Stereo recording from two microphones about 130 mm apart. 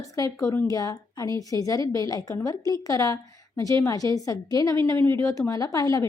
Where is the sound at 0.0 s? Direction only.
25° left (ahead or behind).